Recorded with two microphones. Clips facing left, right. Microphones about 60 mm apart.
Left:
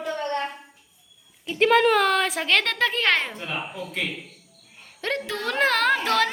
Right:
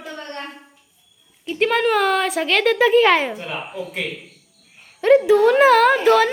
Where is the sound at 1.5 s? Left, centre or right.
Centre.